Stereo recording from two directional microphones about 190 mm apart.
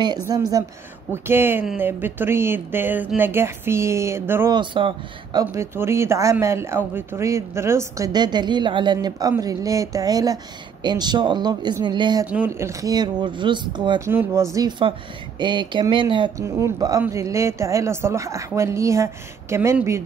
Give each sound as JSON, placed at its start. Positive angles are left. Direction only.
{"t": 0.3, "sound": "speech", "side_deg": -20}
{"t": 4.6, "sound": "speech", "side_deg": -25}
{"t": 12.3, "sound": "speech", "side_deg": -10}
{"t": 16.4, "sound": "speech", "side_deg": -15}